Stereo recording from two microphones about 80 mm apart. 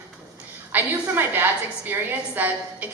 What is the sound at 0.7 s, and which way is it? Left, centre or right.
A woman's voice, right.